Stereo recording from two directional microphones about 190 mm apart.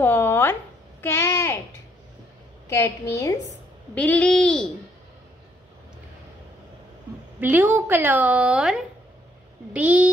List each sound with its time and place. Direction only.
0.0 s a sound: 10° left (ahead or behind)
1.0 s a woman's voice: 15° left (ahead or behind)
2.7 s a woman's voice: 15° left (ahead or behind)
7.3 s a woman's voice: 10° right (ahead or behind)